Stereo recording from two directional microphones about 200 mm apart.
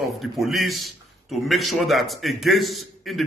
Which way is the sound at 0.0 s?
Centre (ahead or behind).